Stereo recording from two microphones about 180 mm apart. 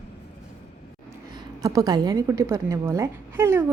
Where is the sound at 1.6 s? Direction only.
20° right (ahead or behind).